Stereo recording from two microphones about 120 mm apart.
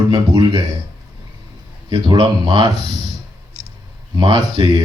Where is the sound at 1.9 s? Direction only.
40° right (ahead or behind).